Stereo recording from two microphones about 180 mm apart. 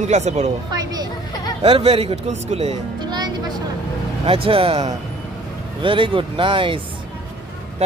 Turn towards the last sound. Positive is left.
turn(degrees=-30)  # may be behind; listen again after turning